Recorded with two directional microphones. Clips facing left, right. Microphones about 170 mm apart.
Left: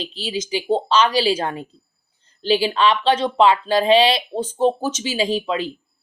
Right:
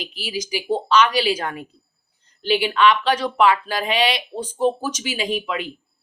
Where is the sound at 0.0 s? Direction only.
25° left (ahead or behind).